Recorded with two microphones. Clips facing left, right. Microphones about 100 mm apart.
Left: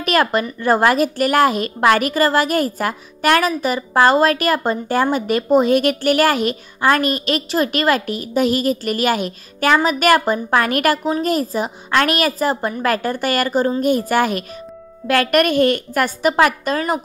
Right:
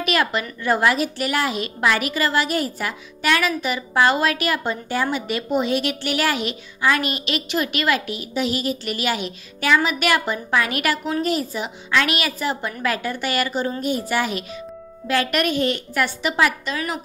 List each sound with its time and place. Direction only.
0.0 s a woman's voice: 45° left (ahead or behind)